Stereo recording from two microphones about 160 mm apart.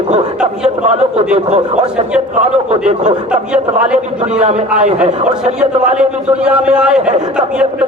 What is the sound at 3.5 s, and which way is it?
Speech, 5° right (ahead or behind).